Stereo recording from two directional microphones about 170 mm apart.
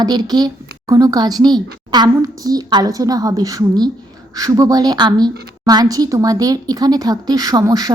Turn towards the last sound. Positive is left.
turn(degrees=-20)  # may be behind; listen again after turning